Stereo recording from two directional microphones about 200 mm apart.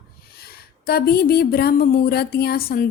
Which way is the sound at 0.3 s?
50° left (ahead or behind).